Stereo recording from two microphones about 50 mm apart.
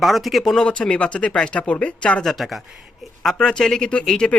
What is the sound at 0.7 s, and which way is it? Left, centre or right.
Speech, left.